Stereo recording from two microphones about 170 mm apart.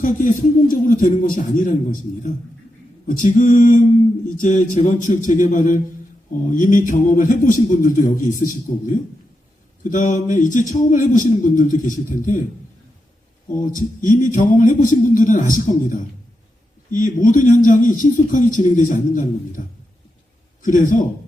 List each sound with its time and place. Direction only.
0.0 s a man's voice: 50° left (ahead or behind)
9.8 s a man's voice: 50° left (ahead or behind)
13.6 s a man's voice: 50° left (ahead or behind)